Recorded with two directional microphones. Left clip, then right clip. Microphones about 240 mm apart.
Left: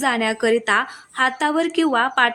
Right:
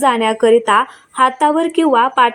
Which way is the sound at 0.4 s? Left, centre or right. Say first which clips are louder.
Right 8 dB; centre.